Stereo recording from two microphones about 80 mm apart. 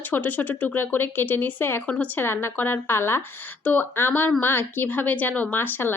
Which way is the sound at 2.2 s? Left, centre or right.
Left.